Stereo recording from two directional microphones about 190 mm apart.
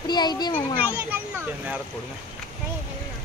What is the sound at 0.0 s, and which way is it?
Speech, 20° left (ahead or behind).